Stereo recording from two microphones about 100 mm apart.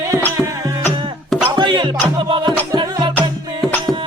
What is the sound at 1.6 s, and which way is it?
Music, 55° right (ahead or behind).